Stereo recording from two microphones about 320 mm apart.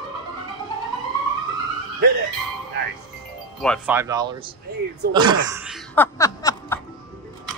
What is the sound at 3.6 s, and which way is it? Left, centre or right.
Speech, centre.